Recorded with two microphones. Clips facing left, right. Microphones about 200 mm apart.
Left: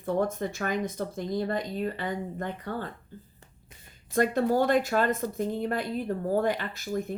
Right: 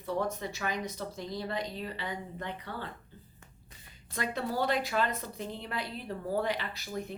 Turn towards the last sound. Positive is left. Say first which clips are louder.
# left 6 dB
turn(degrees=50)  # may be behind; listen again after turning